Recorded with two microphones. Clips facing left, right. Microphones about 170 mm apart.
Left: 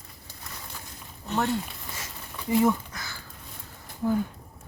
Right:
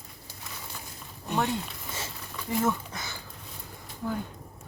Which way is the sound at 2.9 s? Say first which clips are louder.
Right 2 dB; 20° right (ahead or behind).